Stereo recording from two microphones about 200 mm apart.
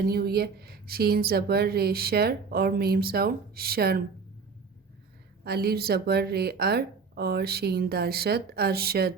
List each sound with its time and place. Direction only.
0.0 s a woman's voice: 50° right (ahead or behind)
5.4 s a woman's voice: 50° right (ahead or behind)